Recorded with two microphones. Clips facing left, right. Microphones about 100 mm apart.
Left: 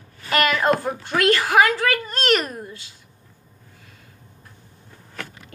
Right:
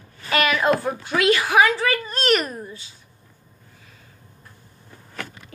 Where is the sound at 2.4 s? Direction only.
70° left (ahead or behind).